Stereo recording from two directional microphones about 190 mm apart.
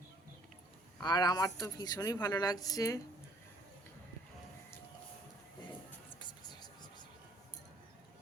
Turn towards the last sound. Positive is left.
turn(degrees=20)  # may be behind; listen again after turning